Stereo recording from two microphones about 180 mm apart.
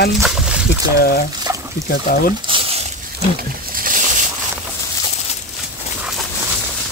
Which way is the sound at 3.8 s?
45° right (ahead or behind).